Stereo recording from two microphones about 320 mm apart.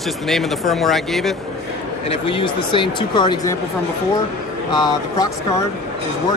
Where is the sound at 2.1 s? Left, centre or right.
Centre.